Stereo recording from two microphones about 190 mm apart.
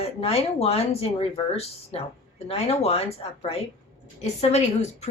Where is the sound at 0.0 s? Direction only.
30° left (ahead or behind).